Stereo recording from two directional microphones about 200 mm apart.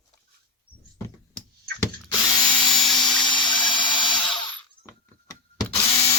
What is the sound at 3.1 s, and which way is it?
Tools, 25° left (ahead or behind).